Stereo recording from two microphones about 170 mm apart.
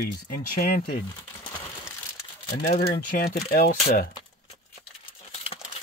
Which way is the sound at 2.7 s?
60° left (ahead or behind).